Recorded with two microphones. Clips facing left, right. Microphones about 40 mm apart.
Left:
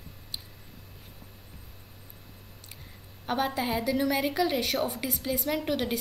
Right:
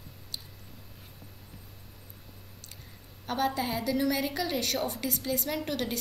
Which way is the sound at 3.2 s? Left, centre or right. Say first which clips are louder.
Left 1 dB; centre.